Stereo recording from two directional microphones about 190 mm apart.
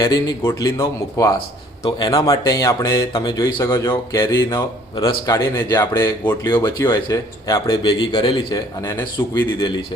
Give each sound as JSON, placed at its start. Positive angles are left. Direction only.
{"t": 0.0, "sound": "speech", "side_deg": 20}